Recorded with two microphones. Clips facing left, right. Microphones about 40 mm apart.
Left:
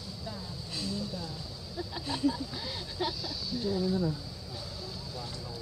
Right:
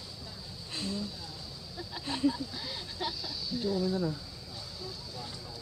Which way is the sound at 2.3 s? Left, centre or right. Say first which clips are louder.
Left 1 dB; centre.